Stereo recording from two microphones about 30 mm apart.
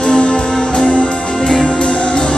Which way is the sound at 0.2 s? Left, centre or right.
Left.